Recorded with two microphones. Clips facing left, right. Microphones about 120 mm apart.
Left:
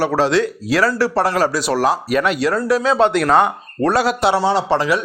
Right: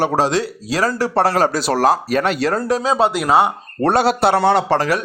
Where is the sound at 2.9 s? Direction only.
10° right (ahead or behind).